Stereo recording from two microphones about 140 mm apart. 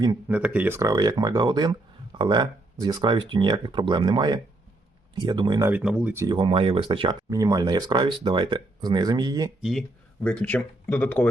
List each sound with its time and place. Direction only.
0.3 s speech: 10° right (ahead or behind)
0.8 s speech: 25° right (ahead or behind)
5.6 s speech: 10° right (ahead or behind)
6.3 s speech: 40° right (ahead or behind)
7.3 s speech: 25° right (ahead or behind)
9.6 s speech: centre (ahead or behind)